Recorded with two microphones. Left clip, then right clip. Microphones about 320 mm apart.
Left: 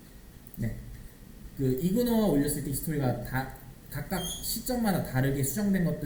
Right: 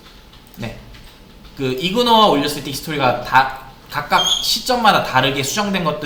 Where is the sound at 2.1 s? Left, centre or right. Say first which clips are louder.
Right 15 dB; right.